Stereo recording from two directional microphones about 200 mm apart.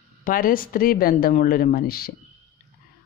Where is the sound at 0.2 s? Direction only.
45° left (ahead or behind).